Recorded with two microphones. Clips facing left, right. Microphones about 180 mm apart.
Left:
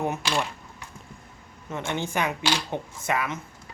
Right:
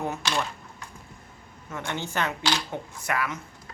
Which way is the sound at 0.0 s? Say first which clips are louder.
Left 2 dB; 15° left (ahead or behind).